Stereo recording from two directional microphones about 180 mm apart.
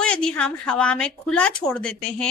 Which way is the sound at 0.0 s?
5° left (ahead or behind).